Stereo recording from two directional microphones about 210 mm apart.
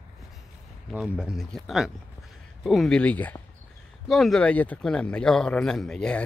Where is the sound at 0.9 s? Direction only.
5° right (ahead or behind).